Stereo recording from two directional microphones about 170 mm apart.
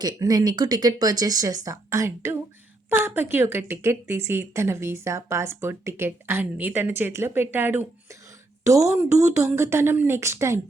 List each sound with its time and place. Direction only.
0.0 s a woman's voice: 20° right (ahead or behind)